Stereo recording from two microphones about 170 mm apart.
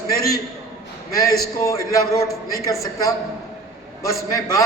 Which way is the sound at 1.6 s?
20° left (ahead or behind).